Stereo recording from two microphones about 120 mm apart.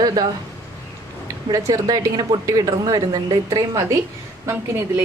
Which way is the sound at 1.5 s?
30° right (ahead or behind).